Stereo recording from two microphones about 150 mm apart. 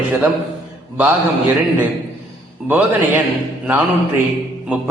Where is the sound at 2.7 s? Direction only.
10° right (ahead or behind).